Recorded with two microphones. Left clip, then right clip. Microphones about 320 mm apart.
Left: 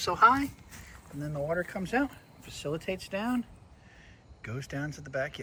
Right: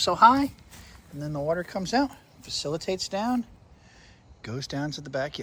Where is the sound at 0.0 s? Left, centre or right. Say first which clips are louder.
Right 5 dB; centre.